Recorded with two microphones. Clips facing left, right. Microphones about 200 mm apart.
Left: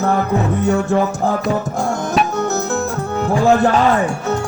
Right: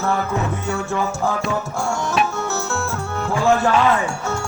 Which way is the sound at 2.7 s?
20° left (ahead or behind).